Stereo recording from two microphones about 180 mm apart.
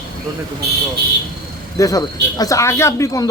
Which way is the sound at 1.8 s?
20° left (ahead or behind).